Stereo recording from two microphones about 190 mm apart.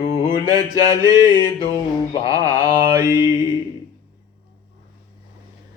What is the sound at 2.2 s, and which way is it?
Mantra, 20° right (ahead or behind).